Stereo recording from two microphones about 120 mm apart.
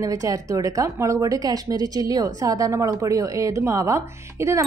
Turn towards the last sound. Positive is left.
turn(degrees=-25)  # may be behind; listen again after turning